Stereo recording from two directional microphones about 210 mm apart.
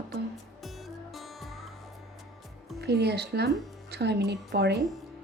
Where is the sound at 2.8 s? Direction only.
50° right (ahead or behind).